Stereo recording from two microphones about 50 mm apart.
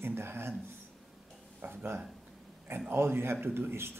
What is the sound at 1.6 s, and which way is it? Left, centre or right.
Speech, right.